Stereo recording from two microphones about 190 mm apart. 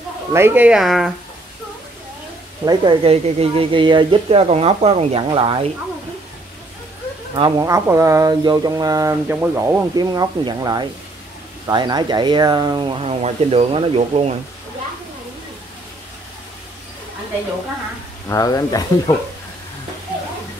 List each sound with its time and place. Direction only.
0.3 s speech: 10° right (ahead or behind)
2.6 s speech: 25° right (ahead or behind)
7.3 s speech: 20° right (ahead or behind)
18.3 s speech: 20° left (ahead or behind)